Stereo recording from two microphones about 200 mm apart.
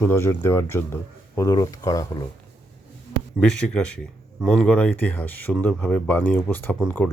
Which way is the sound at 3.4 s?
5° left (ahead or behind).